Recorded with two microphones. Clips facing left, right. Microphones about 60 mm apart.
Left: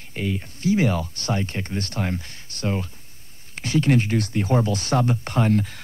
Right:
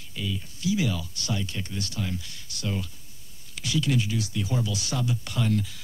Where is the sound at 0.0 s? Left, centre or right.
Left.